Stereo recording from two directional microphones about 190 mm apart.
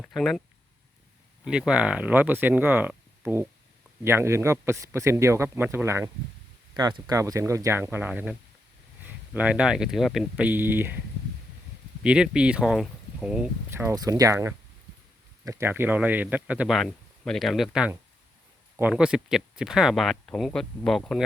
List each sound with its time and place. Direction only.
0.0 s speech: centre (ahead or behind)
1.5 s speech: 5° right (ahead or behind)
12.0 s speech: 5° right (ahead or behind)